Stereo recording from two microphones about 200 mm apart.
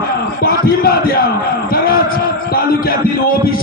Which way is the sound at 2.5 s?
50° left (ahead or behind).